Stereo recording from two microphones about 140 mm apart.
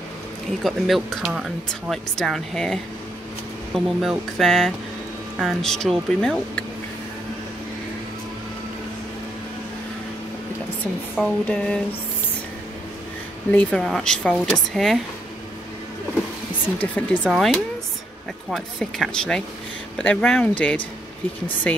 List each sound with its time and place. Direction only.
0.7 s speech: centre (ahead or behind)
11.1 s speech: 5° left (ahead or behind)
13.5 s speech: 10° left (ahead or behind)
16.7 s speech: 10° left (ahead or behind)
17.2 s speech: 5° right (ahead or behind)